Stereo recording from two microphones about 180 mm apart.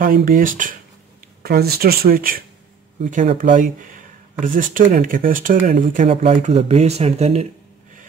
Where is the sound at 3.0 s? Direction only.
40° right (ahead or behind).